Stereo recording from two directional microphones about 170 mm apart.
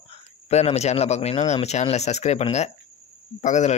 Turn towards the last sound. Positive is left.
turn(degrees=45)  # may be behind; listen again after turning